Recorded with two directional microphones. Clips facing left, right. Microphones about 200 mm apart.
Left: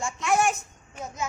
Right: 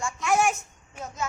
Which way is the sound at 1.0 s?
10° left (ahead or behind).